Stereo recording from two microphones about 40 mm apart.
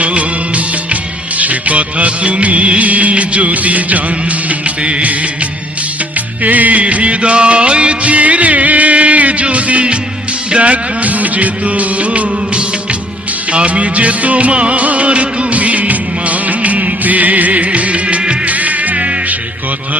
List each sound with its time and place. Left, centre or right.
0.0 s music of bollywood: right
4.4 s music: right
6.4 s music: right